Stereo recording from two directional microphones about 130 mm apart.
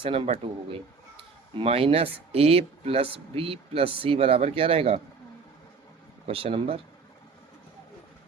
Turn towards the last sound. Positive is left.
turn(degrees=-45)  # may be behind; listen again after turning